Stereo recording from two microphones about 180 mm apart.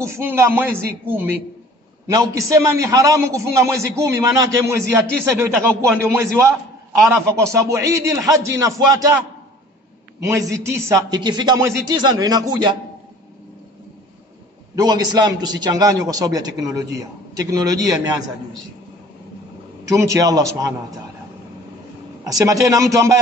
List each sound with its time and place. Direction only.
0.0 s speech: 15° right (ahead or behind)
10.2 s a man's voice: 15° right (ahead or behind)
14.8 s a man's voice: 20° right (ahead or behind)
19.8 s a man's voice: 20° right (ahead or behind)
22.2 s speech: 20° right (ahead or behind)